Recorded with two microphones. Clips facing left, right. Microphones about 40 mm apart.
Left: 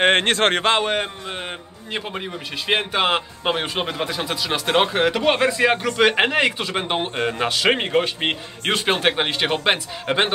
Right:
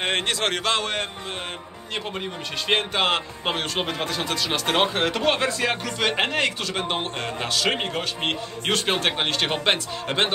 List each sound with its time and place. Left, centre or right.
0.0 s speech: left
2.7 s a man's voice: centre